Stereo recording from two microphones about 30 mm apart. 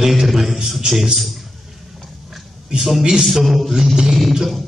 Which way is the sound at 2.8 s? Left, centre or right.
Centre.